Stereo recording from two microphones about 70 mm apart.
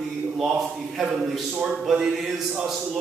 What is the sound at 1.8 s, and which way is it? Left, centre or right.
Speech, centre.